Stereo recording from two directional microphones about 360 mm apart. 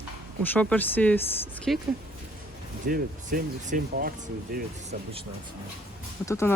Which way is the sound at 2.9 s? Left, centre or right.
Right.